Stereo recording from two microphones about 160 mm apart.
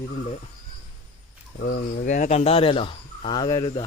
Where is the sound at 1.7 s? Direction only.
60° left (ahead or behind); by 3.6 s 25° left (ahead or behind).